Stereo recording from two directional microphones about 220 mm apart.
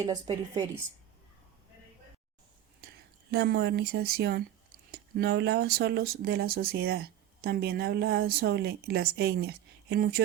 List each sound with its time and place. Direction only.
0.0 s a woman's voice: 15° right (ahead or behind)
2.8 s a sound: 45° right (ahead or behind)
3.3 s speech: 45° right (ahead or behind)